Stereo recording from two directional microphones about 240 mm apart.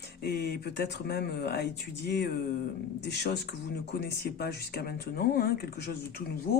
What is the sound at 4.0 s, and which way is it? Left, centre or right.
Speech, left.